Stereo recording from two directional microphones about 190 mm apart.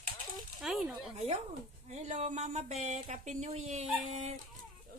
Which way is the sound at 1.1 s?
35° right (ahead or behind).